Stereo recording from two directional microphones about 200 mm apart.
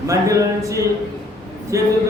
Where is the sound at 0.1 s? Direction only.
15° right (ahead or behind).